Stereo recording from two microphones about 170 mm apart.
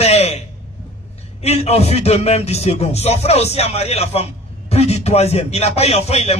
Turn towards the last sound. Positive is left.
turn(degrees=40)  # may be behind; listen again after turning